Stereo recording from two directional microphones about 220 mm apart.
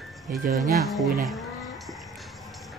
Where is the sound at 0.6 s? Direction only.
Centre (ahead or behind).